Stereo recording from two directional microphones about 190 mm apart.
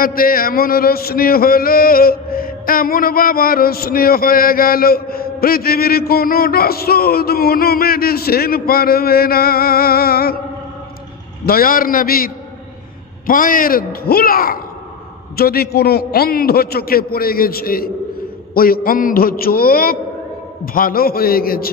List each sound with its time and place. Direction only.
0.0 s a man's voice: 50° left (ahead or behind)
11.4 s a man's voice: 50° left (ahead or behind)
13.3 s a man's voice: 45° left (ahead or behind)